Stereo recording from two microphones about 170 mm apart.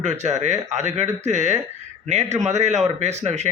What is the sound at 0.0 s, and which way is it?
Speech, 40° right (ahead or behind).